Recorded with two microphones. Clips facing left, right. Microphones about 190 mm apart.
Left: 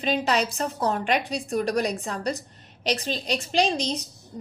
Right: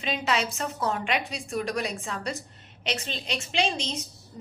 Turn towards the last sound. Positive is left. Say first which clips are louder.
# left 5 dB
turn(degrees=35)  # may be behind; listen again after turning